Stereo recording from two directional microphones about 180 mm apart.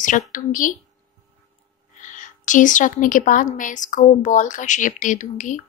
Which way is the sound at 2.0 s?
45° left (ahead or behind).